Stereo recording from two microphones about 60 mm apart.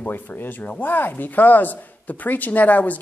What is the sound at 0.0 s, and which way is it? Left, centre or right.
Speech, left.